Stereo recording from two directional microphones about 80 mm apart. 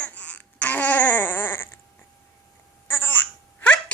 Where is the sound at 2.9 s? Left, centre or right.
Left.